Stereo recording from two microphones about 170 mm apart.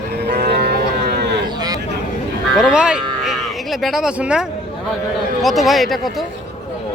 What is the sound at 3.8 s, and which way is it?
Speech, centre (ahead or behind).